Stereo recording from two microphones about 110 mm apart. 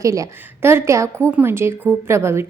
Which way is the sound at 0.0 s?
30° right (ahead or behind).